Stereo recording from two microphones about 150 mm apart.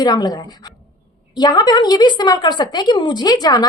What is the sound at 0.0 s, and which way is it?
Speech, 25° left (ahead or behind).